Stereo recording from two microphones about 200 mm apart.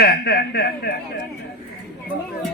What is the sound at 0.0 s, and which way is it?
Speech, 50° left (ahead or behind).